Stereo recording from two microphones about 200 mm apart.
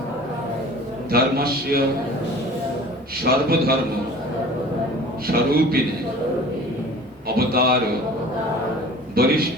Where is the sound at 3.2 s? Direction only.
50° right (ahead or behind).